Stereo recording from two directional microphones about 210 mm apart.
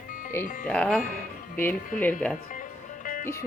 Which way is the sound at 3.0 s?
40° left (ahead or behind).